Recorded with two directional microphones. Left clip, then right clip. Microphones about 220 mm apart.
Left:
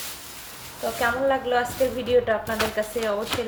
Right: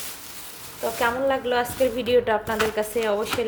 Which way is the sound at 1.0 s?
35° right (ahead or behind).